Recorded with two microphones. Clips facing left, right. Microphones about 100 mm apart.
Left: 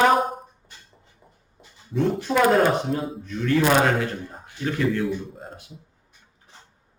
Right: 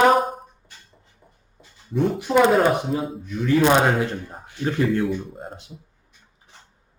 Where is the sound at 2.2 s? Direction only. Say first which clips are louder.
Right 6 dB; 15° right (ahead or behind).